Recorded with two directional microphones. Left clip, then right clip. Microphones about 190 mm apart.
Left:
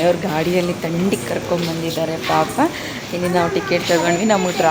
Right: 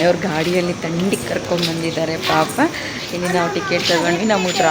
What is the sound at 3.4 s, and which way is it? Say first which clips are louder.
Speech: left 1 dB; 20° left (ahead or behind).